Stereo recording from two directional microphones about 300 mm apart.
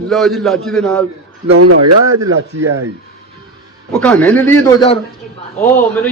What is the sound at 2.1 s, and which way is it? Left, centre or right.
Speech, centre.